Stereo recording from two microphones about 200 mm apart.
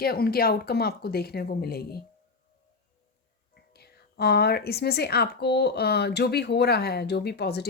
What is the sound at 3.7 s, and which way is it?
Speech, 55° left (ahead or behind).